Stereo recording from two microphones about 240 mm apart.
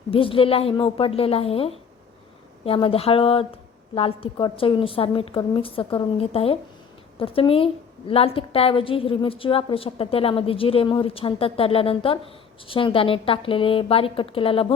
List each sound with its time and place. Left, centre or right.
0.1 s a woman's voice: left